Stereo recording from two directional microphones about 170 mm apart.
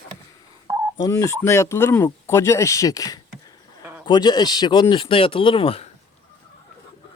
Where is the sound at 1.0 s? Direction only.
15° left (ahead or behind); by 5.8 s 35° left (ahead or behind).